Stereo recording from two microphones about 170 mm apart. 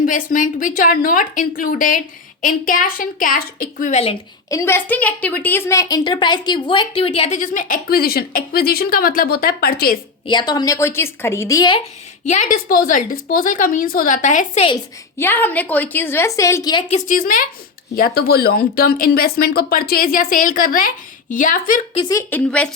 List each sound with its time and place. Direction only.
0.0 s a woman's voice: 50° left (ahead or behind)
4.4 s a woman's voice: 15° left (ahead or behind); by 10.0 s 60° left (ahead or behind)
10.2 s a woman's voice: 25° left (ahead or behind)
12.3 s a woman's voice: 50° left (ahead or behind)
15.2 s a woman's voice: 10° left (ahead or behind)
16.9 s speech: 50° left (ahead or behind)
22.1 s a woman's voice: 10° left (ahead or behind)